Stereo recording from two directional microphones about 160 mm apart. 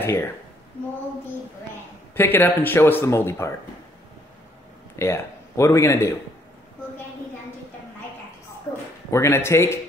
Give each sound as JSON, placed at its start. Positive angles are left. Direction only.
{"t": 0.0, "sound": "a woman's voice", "side_deg": 15}
{"t": 2.1, "sound": "speech", "side_deg": 15}
{"t": 4.9, "sound": "speech", "side_deg": 15}
{"t": 8.7, "sound": "speech", "side_deg": 15}